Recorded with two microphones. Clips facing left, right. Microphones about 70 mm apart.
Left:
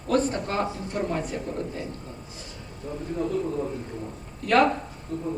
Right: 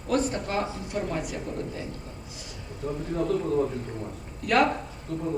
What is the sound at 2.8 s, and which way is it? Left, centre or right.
Speech, right.